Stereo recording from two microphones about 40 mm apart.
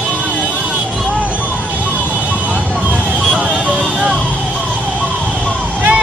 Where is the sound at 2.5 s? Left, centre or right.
Right.